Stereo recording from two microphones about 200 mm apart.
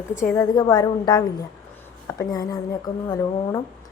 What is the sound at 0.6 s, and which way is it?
A woman's voice, 20° left (ahead or behind).